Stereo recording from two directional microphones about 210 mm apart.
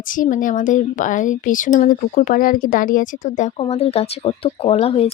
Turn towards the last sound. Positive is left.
turn(degrees=25)  # may be behind; listen again after turning